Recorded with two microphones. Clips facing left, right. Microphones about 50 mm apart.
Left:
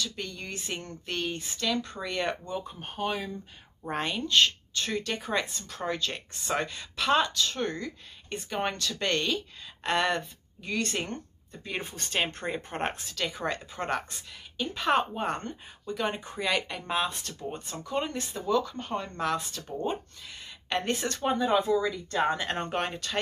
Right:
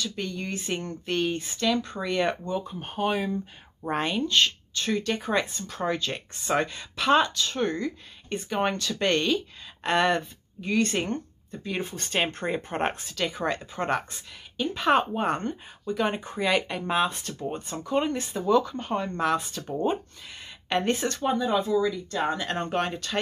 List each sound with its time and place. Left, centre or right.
0.0 s speech: centre
3.0 s speech: right
3.9 s speech: centre
11.6 s speech: centre
12.1 s speech: centre
21.2 s speech: centre